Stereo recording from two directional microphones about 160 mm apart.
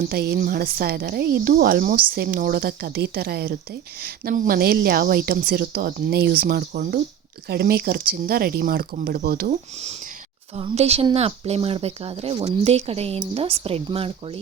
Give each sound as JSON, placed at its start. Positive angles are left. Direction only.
{"t": 0.1, "sound": "speech", "side_deg": -70}
{"t": 4.0, "sound": "speech", "side_deg": -65}
{"t": 10.5, "sound": "speech", "side_deg": -40}